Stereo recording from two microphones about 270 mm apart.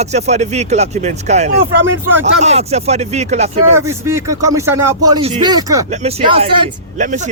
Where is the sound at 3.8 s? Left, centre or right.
Centre.